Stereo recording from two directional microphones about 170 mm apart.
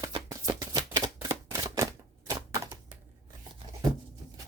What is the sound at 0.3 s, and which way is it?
Shuffling cards, 20° right (ahead or behind).